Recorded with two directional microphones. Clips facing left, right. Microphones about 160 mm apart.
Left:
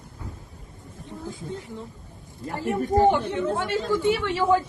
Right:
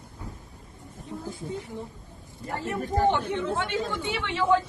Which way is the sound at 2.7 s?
10° left (ahead or behind).